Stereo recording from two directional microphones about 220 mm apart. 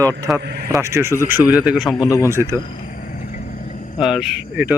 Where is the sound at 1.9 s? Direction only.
15° left (ahead or behind).